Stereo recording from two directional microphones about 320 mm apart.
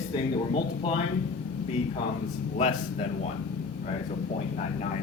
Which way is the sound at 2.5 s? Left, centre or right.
Left.